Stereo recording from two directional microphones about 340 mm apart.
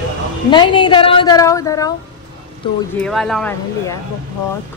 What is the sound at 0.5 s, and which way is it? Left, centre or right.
A woman's voice, centre.